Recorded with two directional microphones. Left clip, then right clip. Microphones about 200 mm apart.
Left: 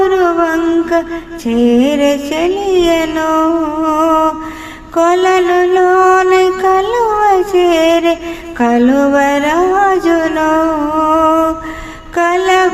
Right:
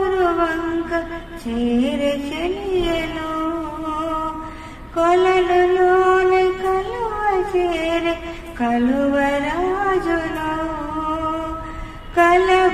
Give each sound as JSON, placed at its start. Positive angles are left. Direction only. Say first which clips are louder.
{"t": 0.0, "sound": "music", "louder": "left 7 dB", "side_deg": 40}
{"t": 4.9, "sound": "mantra", "louder": "left 6 dB", "side_deg": 45}
{"t": 8.5, "sound": "a sound", "louder": "left 9 dB", "side_deg": 45}